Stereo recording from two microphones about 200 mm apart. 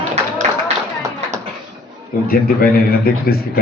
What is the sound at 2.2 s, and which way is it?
A man's voice, 50° left (ahead or behind).